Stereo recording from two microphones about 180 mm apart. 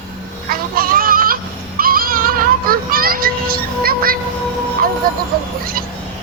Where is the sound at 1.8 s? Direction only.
55° right (ahead or behind).